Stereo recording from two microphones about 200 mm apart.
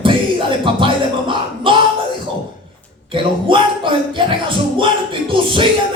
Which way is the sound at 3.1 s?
25° right (ahead or behind).